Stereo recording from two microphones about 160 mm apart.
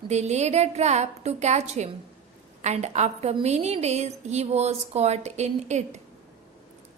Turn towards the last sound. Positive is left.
turn(degrees=-45)  # may be behind; listen again after turning